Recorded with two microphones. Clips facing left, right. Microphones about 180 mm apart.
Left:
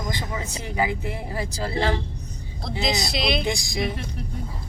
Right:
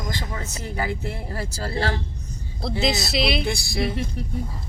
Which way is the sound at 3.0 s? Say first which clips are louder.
Right 1 dB; 5° right (ahead or behind).